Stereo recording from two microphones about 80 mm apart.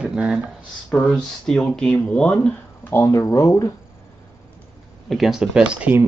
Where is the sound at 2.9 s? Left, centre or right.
Left.